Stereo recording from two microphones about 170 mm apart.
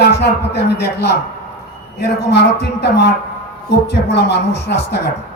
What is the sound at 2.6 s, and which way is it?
A man's voice, 80° left.